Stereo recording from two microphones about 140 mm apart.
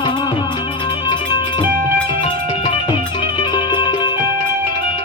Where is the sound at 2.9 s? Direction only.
35° left (ahead or behind).